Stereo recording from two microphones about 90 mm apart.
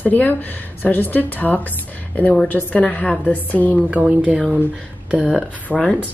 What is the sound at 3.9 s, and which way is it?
Speech, 15° right (ahead or behind).